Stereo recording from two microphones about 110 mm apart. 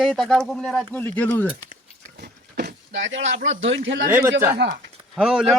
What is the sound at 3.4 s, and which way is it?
Speech, 90° right.